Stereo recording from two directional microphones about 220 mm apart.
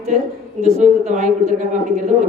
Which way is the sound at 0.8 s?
30° right (ahead or behind).